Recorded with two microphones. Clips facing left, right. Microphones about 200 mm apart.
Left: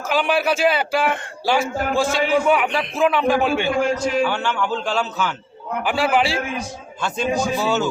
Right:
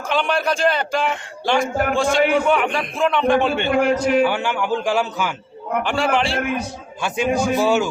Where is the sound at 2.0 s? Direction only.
50° right (ahead or behind).